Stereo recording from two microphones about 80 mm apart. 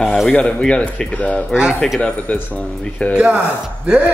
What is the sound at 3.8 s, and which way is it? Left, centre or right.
Speech, centre.